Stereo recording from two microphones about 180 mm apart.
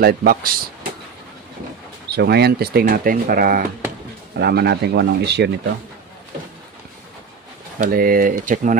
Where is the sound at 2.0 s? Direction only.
65° right (ahead or behind).